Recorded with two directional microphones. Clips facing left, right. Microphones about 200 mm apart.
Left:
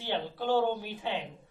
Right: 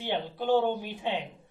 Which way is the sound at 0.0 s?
20° right (ahead or behind).